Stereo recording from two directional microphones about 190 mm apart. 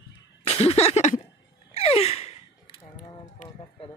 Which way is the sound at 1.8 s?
30° left (ahead or behind).